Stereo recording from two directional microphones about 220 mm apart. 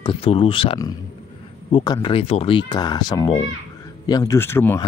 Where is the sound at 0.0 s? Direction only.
25° left (ahead or behind).